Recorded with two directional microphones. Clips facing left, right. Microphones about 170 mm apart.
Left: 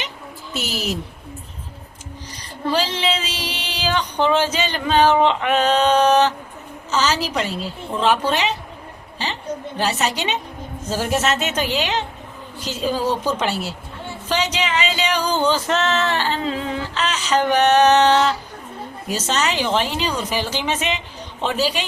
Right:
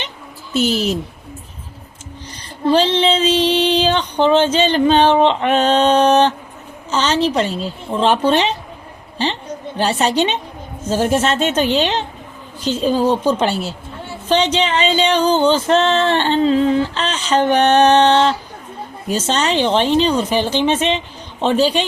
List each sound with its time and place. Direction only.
0.5 s music: 30° right (ahead or behind)
2.7 s music: 30° right (ahead or behind)
9.7 s a woman's voice: 30° right (ahead or behind)
10.8 s music: 25° right (ahead or behind)
13.4 s a woman's voice: 30° right (ahead or behind)
14.3 s music: 30° right (ahead or behind)